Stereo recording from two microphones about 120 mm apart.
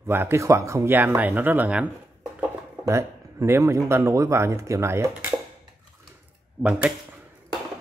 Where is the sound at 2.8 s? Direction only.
25° right (ahead or behind).